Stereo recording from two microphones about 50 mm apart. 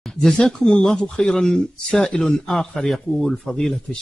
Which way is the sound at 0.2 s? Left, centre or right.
Centre.